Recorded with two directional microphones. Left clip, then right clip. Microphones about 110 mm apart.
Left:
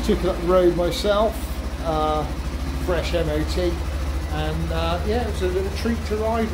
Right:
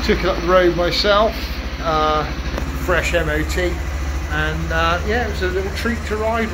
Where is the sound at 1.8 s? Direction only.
25° right (ahead or behind).